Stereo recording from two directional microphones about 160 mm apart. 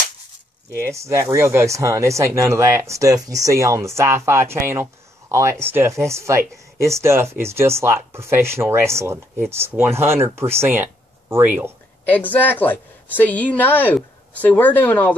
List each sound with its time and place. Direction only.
0.7 s speech: 15° right (ahead or behind)
12.1 s speech: 10° left (ahead or behind)